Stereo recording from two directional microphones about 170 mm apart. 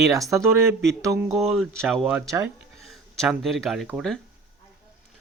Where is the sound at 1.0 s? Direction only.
15° right (ahead or behind).